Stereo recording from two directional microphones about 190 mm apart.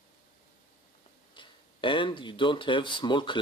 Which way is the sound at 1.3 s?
25° left (ahead or behind).